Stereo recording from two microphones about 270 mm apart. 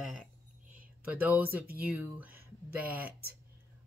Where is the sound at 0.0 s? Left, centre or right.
Centre.